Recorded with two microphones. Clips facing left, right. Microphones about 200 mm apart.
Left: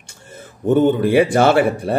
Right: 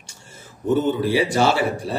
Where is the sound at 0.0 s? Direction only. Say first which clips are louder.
Left 7 dB; 55° left (ahead or behind).